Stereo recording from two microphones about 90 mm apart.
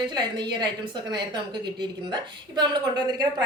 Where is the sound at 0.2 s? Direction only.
55° right (ahead or behind).